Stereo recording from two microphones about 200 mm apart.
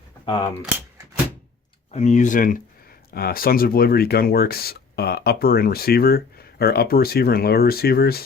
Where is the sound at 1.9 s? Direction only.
35° left (ahead or behind).